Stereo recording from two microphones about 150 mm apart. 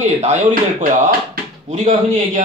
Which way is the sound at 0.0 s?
50° right (ahead or behind).